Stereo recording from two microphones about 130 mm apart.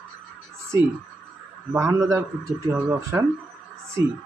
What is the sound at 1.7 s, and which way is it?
Speech, 20° right (ahead or behind).